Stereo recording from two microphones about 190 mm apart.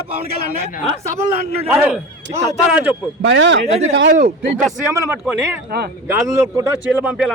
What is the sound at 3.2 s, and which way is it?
Speech, 75° right (ahead or behind).